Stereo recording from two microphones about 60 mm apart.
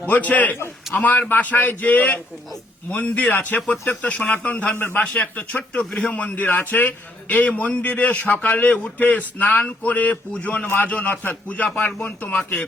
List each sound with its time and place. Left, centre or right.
0.1 s a man's voice: left
5.8 s a man's voice: centre
6.3 s a man's voice: left
10.7 s a man's voice: left